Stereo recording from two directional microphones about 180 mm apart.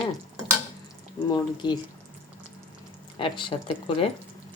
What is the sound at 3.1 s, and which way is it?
Speech, 25° left (ahead or behind).